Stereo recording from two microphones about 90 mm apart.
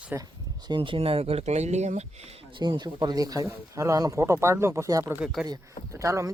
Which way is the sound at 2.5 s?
60° right (ahead or behind).